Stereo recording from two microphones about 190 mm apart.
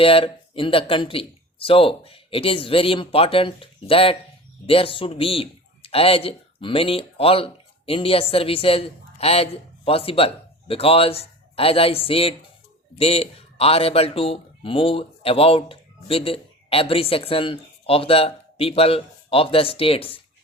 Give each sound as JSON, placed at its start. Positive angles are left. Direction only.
{"t": 0.0, "sound": "speech", "side_deg": 30}